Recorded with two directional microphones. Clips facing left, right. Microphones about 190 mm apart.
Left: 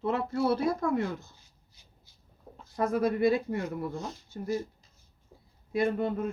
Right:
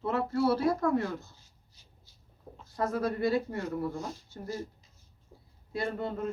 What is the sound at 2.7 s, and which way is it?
Speech, 15° left (ahead or behind).